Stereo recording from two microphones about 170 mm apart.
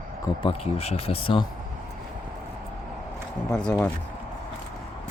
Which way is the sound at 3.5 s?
5° left (ahead or behind).